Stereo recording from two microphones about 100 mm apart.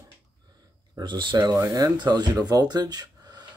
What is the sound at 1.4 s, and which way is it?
Speech, 35° right (ahead or behind).